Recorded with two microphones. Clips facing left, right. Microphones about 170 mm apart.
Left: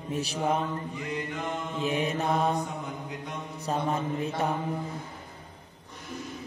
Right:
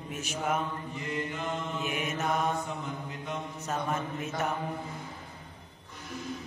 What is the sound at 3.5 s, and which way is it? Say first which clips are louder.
Mantra: left 5 dB; 35° left (ahead or behind).